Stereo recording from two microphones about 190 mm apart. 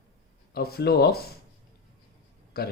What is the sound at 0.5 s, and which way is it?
Speech, 55° left (ahead or behind).